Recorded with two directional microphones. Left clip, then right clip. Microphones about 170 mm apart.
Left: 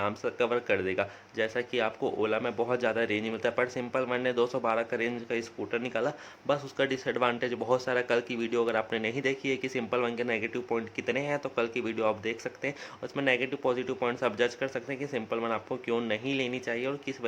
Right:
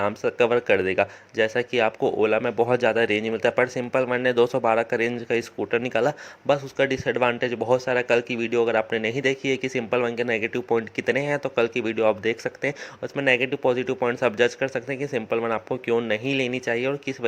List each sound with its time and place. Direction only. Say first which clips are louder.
0.0 s speech: right 8 dB; 30° right (ahead or behind)